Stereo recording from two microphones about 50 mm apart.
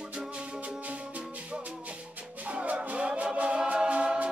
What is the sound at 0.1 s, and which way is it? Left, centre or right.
Music, right.